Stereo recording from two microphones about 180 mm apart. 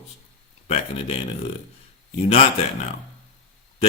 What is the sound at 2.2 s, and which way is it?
Speech, 35° left (ahead or behind).